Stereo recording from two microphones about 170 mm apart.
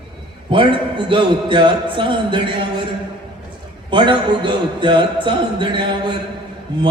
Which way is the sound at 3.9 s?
30° right (ahead or behind).